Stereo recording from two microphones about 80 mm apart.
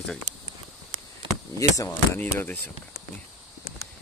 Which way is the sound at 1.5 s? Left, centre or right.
Left.